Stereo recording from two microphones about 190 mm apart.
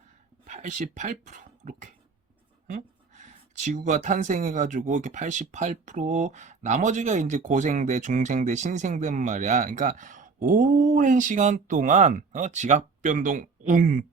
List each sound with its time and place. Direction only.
0.4 s speech: 40° right (ahead or behind)